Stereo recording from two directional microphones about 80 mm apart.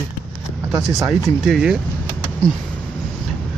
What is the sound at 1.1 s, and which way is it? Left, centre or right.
Speech, centre.